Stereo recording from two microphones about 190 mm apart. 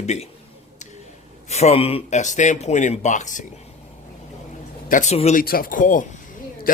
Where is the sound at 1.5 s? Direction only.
35° left (ahead or behind).